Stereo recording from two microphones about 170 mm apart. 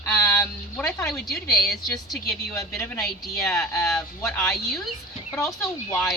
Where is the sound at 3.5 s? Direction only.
10° left (ahead or behind).